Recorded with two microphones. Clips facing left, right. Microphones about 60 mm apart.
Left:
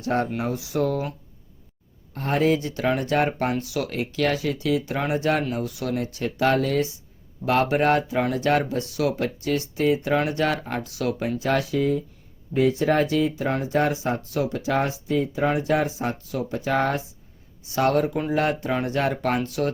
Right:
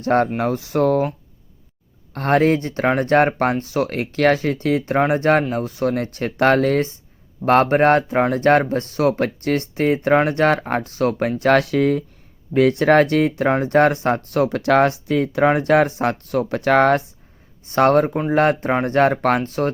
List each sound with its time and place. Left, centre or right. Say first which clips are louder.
0.0 s speech: right 7 dB; right
2.1 s speech: right 5 dB; right
17.7 s speech: right 6 dB; right